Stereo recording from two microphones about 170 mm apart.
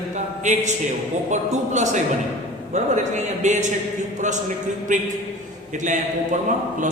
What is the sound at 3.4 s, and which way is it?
A man's voice, 45° right (ahead or behind).